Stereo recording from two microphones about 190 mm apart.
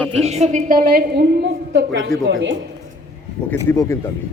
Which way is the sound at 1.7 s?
70° right (ahead or behind).